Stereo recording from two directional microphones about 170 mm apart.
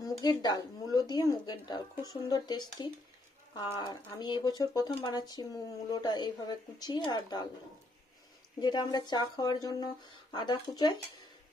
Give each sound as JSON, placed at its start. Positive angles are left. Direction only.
{"t": 0.0, "sound": "speech", "side_deg": 25}
{"t": 8.5, "sound": "speech", "side_deg": 25}